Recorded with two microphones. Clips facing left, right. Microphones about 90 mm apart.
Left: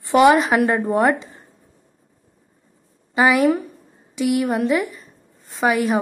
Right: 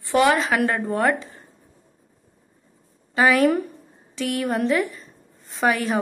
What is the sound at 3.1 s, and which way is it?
A woman's voice, 15° left (ahead or behind).